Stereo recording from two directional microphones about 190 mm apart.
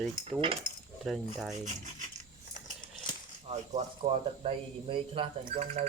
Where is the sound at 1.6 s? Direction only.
40° right (ahead or behind).